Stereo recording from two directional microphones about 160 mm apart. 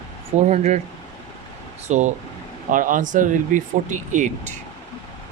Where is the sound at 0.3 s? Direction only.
45° right (ahead or behind).